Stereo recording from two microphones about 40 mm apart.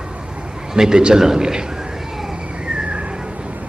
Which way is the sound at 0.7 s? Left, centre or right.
Centre.